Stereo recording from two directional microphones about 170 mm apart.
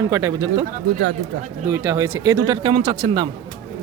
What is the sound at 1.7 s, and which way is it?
Speech, 15° right (ahead or behind).